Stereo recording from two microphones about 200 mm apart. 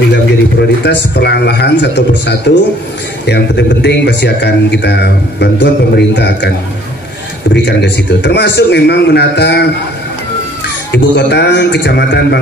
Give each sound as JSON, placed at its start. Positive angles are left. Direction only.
{"t": 0.1, "sound": "speech", "side_deg": 55}
{"t": 7.5, "sound": "speech", "side_deg": 60}
{"t": 10.9, "sound": "speech", "side_deg": 60}